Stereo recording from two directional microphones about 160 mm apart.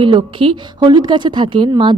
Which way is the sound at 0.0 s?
35° right (ahead or behind).